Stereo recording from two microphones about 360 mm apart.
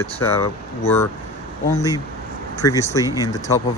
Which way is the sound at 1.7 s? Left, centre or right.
Centre.